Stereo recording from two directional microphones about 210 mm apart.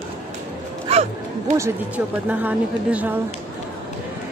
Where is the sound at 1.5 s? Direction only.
10° right (ahead or behind).